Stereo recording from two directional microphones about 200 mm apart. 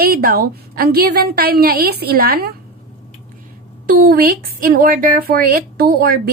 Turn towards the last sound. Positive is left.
turn(degrees=-50)  # may be behind; listen again after turning